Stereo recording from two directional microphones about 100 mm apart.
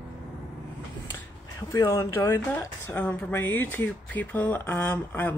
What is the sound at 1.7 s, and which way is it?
A woman's voice, 30° left (ahead or behind).